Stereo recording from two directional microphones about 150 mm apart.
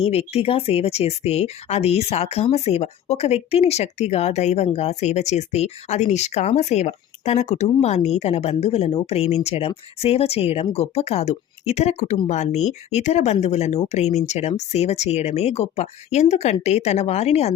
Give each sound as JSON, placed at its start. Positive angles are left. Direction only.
{"t": 0.0, "sound": "speech", "side_deg": 45}